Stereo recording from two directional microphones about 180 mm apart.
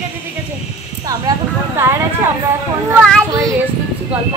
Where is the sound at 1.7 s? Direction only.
15° right (ahead or behind).